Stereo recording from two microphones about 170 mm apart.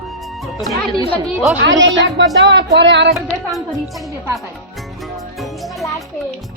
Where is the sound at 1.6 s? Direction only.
90° right.